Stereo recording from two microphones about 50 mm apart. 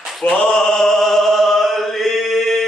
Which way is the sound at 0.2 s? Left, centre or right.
Left.